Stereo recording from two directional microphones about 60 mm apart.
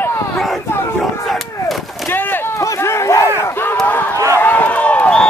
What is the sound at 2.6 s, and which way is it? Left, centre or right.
Run, left.